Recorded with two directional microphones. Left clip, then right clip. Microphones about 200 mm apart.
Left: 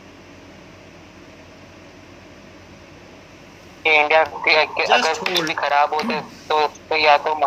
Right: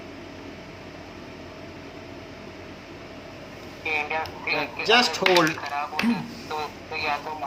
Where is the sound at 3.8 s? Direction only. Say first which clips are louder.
Left 12 dB; 50° left (ahead or behind).